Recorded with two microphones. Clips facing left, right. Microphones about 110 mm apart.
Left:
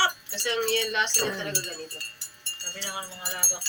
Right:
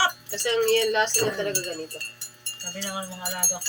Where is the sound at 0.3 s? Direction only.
45° right (ahead or behind).